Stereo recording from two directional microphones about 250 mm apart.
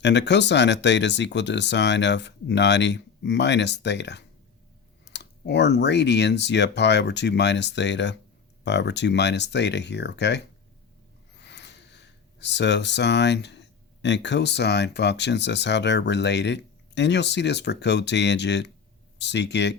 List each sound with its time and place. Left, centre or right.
0.0 s speech: left